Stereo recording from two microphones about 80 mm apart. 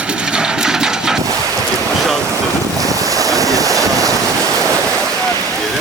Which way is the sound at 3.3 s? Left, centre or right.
Right.